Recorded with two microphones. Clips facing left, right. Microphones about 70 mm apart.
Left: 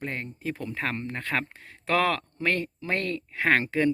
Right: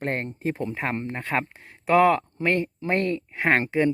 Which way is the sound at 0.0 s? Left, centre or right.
Right.